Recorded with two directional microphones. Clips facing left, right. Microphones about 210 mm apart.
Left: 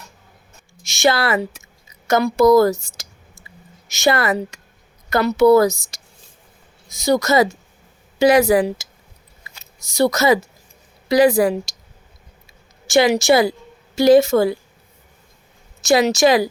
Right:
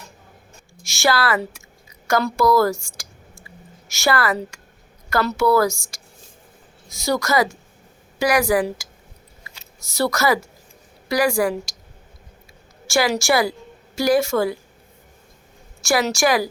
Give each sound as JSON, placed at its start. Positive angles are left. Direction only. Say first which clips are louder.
{"t": 0.9, "sound": "a woman's voice", "louder": "left 3 dB", "side_deg": 20}
{"t": 9.9, "sound": "a woman's voice", "louder": "left 4 dB", "side_deg": 20}
{"t": 12.9, "sound": "a woman's voice", "louder": "left 5 dB", "side_deg": 20}
{"t": 15.8, "sound": "a woman's voice", "louder": "left 5 dB", "side_deg": 20}